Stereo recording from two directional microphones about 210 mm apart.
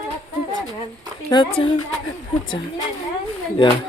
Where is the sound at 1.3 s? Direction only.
25° left (ahead or behind).